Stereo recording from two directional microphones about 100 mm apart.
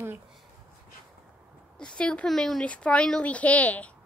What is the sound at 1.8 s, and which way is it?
Speech, 10° left (ahead or behind).